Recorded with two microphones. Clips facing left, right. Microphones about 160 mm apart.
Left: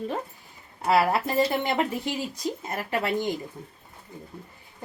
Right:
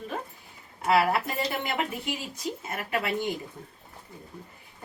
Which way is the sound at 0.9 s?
35° left (ahead or behind).